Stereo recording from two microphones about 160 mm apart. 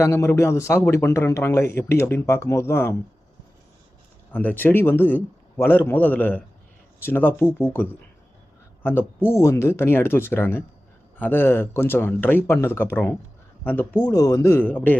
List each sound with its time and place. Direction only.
0.0 s a man's voice: 15° left (ahead or behind)
4.3 s a man's voice: 10° left (ahead or behind)
14.1 s a man's voice: 20° left (ahead or behind)